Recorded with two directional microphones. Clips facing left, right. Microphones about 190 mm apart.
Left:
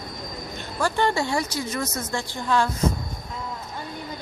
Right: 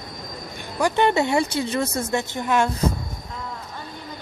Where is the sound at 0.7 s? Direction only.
15° right (ahead or behind).